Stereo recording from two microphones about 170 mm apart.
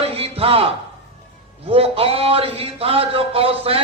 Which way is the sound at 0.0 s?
35° right (ahead or behind).